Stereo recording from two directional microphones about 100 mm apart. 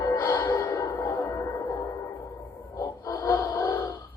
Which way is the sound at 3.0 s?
30° left (ahead or behind).